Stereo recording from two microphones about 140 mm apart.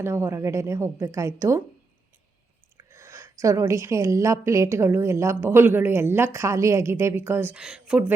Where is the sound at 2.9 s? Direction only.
20° right (ahead or behind).